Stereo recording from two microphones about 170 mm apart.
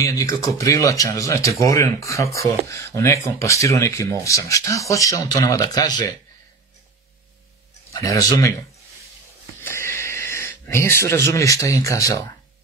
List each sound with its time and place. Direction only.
0.0 s speech: 20° left (ahead or behind)
7.9 s speech: 20° left (ahead or behind)
9.6 s a sound: 15° left (ahead or behind)